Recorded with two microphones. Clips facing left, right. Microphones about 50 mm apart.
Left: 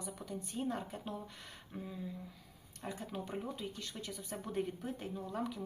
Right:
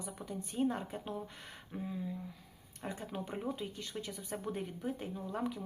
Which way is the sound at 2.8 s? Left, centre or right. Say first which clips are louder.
Right 1 dB; centre.